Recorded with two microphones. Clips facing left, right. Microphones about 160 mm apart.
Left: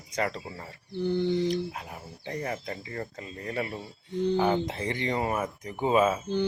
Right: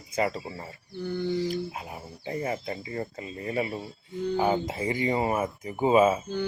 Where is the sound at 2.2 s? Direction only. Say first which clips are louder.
Right 3 dB; 5° right (ahead or behind).